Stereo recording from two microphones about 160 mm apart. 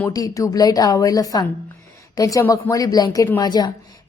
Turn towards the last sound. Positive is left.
turn(degrees=25)  # may be behind; listen again after turning